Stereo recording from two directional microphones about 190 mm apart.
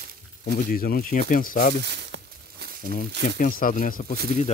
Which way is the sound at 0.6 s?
50° left (ahead or behind).